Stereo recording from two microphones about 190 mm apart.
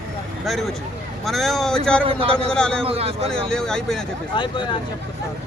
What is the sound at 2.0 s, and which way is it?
Speech, 30° right (ahead or behind).